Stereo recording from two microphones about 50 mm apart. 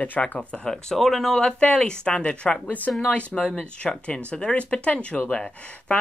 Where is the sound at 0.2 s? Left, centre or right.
Left.